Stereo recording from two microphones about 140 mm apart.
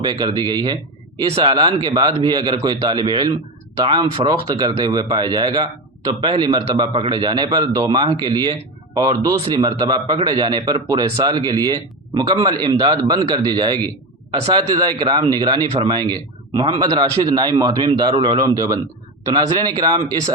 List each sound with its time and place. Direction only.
0.0 s a man's voice: 30° right (ahead or behind)